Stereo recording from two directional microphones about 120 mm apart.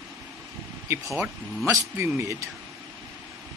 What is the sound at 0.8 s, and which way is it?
Speech, 25° right (ahead or behind).